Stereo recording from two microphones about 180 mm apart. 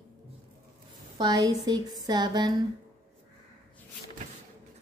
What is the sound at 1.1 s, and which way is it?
A woman's voice, 20° right (ahead or behind).